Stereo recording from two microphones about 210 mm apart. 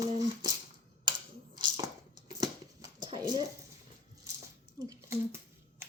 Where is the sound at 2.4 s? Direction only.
20° right (ahead or behind).